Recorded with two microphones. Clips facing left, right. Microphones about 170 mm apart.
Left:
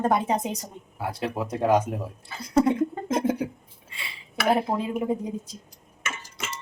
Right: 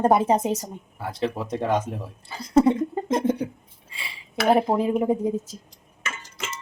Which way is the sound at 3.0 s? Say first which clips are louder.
Right 4 dB; 5° left (ahead or behind).